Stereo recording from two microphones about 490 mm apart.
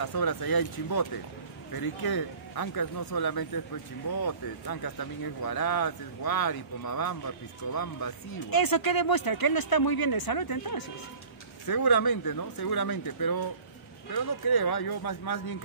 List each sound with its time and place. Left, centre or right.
0.0 s speech: left